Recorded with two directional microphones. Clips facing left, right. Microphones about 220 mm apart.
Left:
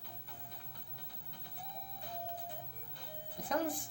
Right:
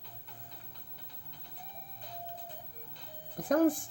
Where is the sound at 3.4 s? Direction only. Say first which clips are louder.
Right 10 dB; 50° right (ahead or behind).